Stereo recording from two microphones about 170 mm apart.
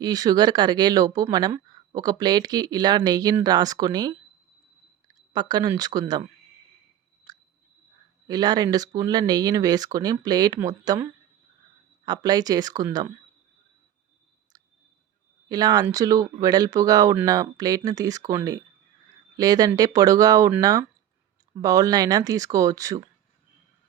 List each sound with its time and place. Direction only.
0.0 s speech: 25° right (ahead or behind)
7.3 s chewing: 20° right (ahead or behind)
8.3 s speech: 25° right (ahead or behind)
15.4 s speech: 25° right (ahead or behind)